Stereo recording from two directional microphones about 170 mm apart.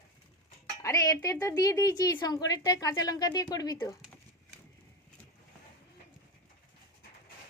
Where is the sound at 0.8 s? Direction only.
20° left (ahead or behind).